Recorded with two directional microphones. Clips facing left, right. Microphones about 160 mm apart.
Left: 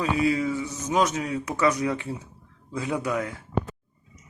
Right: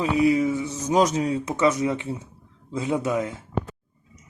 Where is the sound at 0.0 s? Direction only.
20° right (ahead or behind).